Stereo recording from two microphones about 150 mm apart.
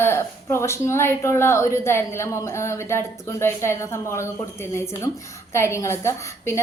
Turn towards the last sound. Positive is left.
turn(degrees=15)  # may be behind; listen again after turning